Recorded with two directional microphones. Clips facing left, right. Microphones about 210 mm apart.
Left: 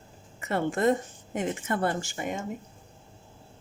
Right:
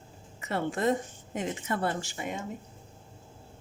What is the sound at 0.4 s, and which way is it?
A woman's voice, 50° left (ahead or behind).